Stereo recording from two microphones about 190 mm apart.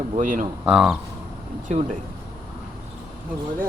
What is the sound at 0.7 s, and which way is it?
Speech, 5° right (ahead or behind).